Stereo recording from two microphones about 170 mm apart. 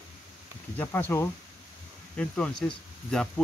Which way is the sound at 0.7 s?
15° left (ahead or behind).